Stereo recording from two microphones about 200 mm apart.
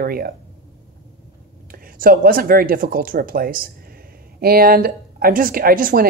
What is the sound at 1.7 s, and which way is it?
Speech, 45° right (ahead or behind).